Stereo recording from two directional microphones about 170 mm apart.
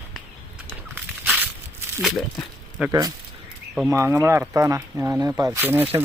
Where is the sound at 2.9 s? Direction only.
20° right (ahead or behind).